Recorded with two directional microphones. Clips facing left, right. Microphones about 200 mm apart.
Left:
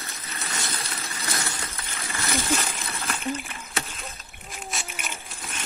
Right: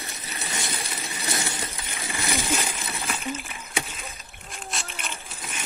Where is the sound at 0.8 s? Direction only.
15° right (ahead or behind).